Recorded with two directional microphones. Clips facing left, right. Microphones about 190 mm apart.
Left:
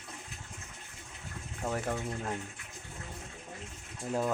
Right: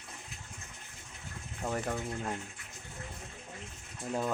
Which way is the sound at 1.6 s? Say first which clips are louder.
Left 1 dB; centre (ahead or behind).